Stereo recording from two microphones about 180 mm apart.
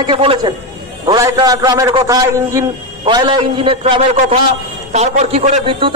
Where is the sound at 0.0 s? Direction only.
30° right (ahead or behind).